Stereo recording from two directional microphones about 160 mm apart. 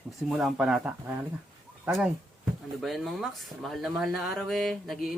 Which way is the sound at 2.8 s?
Centre (ahead or behind).